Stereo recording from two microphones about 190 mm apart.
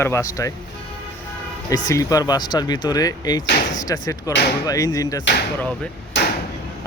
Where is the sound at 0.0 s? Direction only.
15° left (ahead or behind).